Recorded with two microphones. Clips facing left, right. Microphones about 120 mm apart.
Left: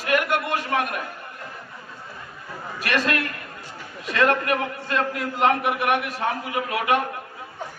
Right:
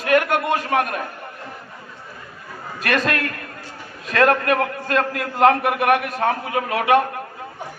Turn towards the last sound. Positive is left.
turn(degrees=-40)  # may be behind; listen again after turning